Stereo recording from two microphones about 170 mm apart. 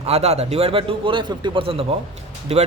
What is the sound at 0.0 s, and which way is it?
A man's voice, 40° right (ahead or behind).